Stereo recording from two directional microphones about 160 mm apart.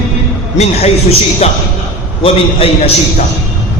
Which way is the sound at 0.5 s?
45° left (ahead or behind).